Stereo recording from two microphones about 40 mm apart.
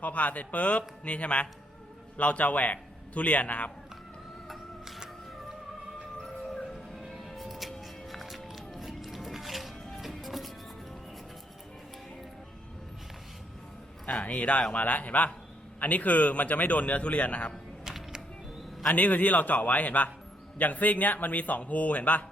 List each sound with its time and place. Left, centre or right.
0.0 s a man's voice: left
7.0 s music: centre
14.1 s a man's voice: left
17.8 s music: centre
18.9 s a man's voice: left